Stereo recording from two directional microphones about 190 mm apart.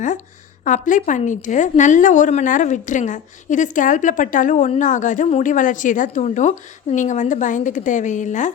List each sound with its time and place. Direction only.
0.6 s a woman's voice: 45° left (ahead or behind)